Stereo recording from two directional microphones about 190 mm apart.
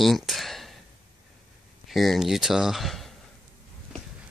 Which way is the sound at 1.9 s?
Centre (ahead or behind).